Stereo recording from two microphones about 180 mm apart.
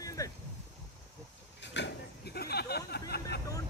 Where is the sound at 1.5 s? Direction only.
75° left (ahead or behind).